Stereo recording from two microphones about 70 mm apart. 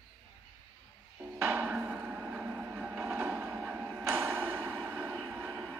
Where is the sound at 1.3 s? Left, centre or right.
Right.